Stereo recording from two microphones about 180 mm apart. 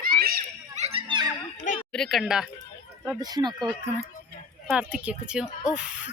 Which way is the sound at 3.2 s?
20° right (ahead or behind).